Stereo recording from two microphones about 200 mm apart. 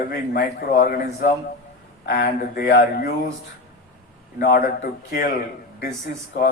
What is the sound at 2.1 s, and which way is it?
Speech, 50° left (ahead or behind).